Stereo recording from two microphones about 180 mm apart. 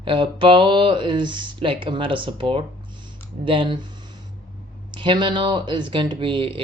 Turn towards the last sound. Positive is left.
turn(degrees=-30)  # may be behind; listen again after turning